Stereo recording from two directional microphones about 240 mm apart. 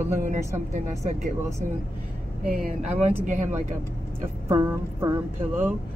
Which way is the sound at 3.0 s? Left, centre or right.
Right.